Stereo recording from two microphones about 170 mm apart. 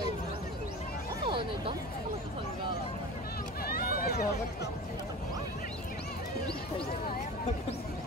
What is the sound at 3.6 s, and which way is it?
Run, 60° left (ahead or behind).